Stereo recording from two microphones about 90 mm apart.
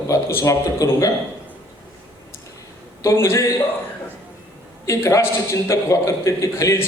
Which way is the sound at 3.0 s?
30° left (ahead or behind).